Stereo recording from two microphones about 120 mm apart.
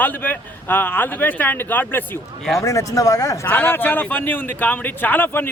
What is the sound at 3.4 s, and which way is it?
Speech, 15° left (ahead or behind).